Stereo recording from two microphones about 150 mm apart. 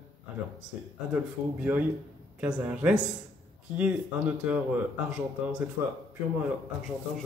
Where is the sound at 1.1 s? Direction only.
10° right (ahead or behind).